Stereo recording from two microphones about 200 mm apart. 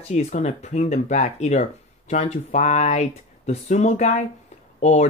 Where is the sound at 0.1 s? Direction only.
35° left (ahead or behind).